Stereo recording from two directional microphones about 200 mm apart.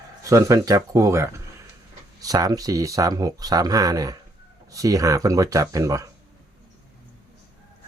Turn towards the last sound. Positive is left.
turn(degrees=-15)  # may be behind; listen again after turning